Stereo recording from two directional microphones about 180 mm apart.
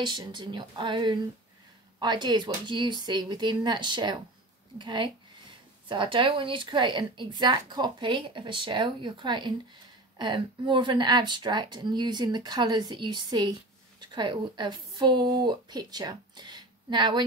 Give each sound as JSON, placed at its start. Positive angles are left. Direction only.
{"t": 0.0, "sound": "a woman's voice", "side_deg": -25}